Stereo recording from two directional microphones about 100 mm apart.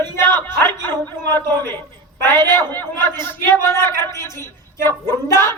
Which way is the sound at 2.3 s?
20° left (ahead or behind).